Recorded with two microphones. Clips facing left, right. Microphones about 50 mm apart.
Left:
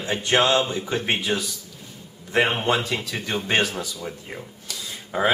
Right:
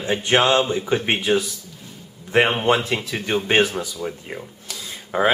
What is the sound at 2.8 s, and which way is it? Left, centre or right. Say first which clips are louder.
Speech: right 3 dB; centre.